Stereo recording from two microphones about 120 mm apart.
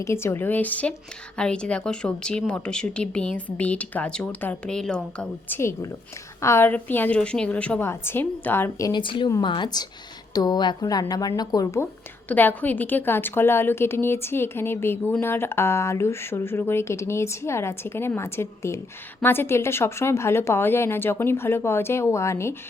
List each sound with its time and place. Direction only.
0.0 s a woman's voice: 20° left (ahead or behind)
5.5 s a woman's voice: 20° left (ahead or behind)
7.8 s speech: 20° left (ahead or behind)
8.9 s a woman's voice: 45° left (ahead or behind); by 11.9 s 25° left (ahead or behind)
12.3 s speech: 15° left (ahead or behind)